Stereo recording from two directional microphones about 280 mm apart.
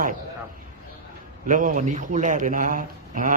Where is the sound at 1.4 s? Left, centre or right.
Right.